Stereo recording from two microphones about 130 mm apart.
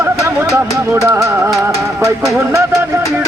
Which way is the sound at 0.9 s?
20° right (ahead or behind).